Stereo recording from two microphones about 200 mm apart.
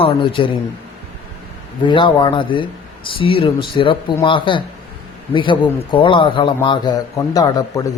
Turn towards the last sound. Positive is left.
turn(degrees=15)  # may be behind; listen again after turning